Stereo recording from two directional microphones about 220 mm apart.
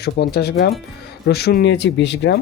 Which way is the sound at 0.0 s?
45° left (ahead or behind).